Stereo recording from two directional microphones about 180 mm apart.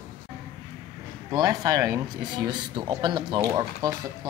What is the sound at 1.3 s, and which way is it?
Speech, 20° right (ahead or behind).